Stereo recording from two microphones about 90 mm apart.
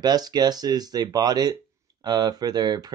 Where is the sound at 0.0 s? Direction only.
50° right (ahead or behind).